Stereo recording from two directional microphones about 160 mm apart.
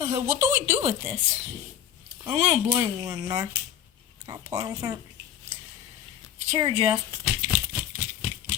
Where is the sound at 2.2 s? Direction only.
40° right (ahead or behind).